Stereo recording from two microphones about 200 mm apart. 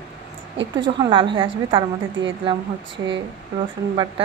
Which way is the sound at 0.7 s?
25° right (ahead or behind).